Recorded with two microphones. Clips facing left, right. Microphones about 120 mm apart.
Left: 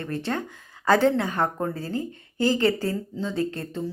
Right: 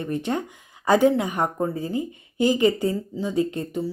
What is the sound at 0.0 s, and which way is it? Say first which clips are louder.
Speech: right 3 dB; 15° right (ahead or behind).